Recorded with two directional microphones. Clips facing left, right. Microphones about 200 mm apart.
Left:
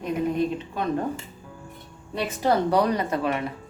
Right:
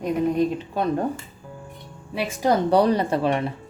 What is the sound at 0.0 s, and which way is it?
Speech, 35° right (ahead or behind).